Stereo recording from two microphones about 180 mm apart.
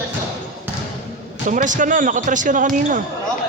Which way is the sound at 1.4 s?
45° right (ahead or behind).